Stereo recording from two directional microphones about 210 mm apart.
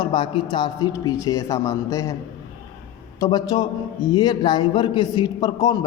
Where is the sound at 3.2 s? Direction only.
20° left (ahead or behind).